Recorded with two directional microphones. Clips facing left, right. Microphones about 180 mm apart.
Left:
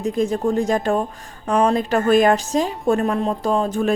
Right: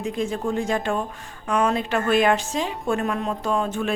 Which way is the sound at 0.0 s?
40° left (ahead or behind).